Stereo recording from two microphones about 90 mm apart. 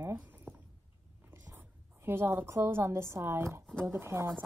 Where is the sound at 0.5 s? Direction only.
20° right (ahead or behind).